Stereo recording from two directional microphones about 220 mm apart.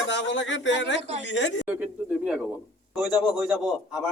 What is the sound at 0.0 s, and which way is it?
A woman's voice, 55° left (ahead or behind).